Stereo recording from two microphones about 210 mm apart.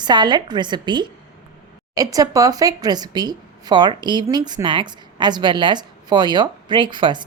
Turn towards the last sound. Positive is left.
turn(degrees=-20)  # may be behind; listen again after turning